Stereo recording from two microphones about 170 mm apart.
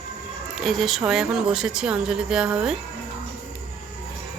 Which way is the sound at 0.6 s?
Centre (ahead or behind).